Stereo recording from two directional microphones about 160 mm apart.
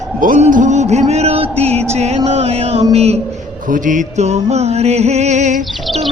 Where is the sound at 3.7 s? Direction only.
55° right (ahead or behind).